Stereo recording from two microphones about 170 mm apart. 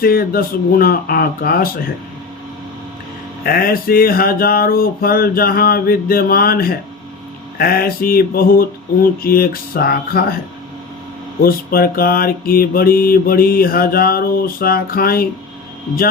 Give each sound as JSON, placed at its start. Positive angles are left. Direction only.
{"t": 0.0, "sound": "mantra", "side_deg": 60}
{"t": 3.4, "sound": "mantra", "side_deg": 60}
{"t": 11.4, "sound": "mantra", "side_deg": 60}